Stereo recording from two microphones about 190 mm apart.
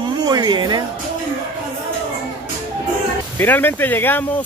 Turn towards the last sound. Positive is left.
turn(degrees=10)  # may be behind; listen again after turning